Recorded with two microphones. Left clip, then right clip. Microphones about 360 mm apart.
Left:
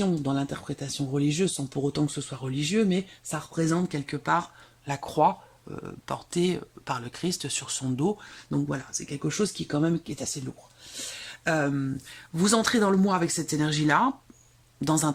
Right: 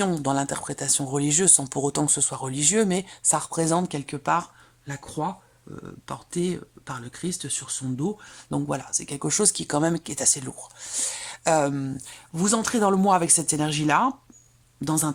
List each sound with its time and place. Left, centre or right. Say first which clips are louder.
0.2 s speech: right 5 dB; centre
11.2 s a sound: right 5 dB; centre
12.3 s speech: left 1 dB; centre